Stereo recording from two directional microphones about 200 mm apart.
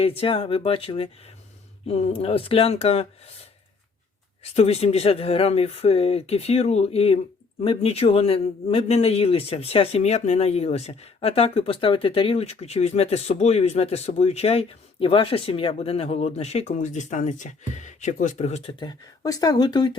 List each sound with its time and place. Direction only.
0.0 s speech: 25° left (ahead or behind)
4.5 s a man's voice: 30° left (ahead or behind)
18.8 s speech: 20° left (ahead or behind)